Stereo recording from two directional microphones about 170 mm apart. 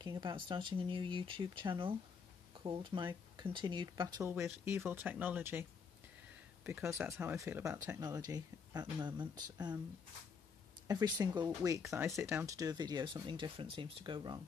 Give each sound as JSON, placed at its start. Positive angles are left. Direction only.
{"t": 0.0, "sound": "speech", "side_deg": -25}
{"t": 10.9, "sound": "speech", "side_deg": -25}